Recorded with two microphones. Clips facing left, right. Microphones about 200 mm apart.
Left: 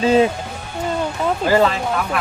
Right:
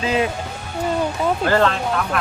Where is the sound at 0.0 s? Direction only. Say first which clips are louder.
Left 6 dB; 30° left (ahead or behind).